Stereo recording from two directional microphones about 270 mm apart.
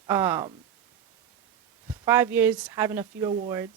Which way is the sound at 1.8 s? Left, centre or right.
Centre.